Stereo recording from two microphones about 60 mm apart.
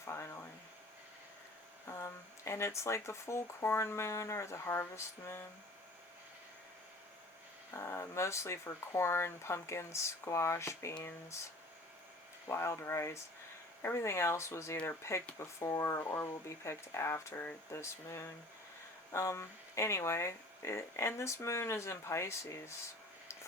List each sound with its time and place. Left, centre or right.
1.9 s speech: left
7.7 s speech: left
12.5 s speech: left
16.0 s speech: left